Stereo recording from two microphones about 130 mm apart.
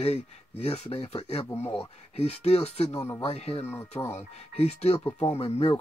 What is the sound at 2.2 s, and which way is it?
Speech, 55° left (ahead or behind).